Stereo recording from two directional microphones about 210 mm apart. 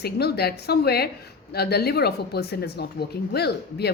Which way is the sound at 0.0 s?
50° left (ahead or behind).